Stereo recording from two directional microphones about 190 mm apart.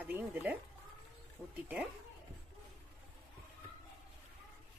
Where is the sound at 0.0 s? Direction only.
10° right (ahead or behind).